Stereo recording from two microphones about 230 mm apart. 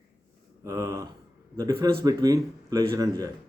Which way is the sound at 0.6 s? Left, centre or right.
Centre.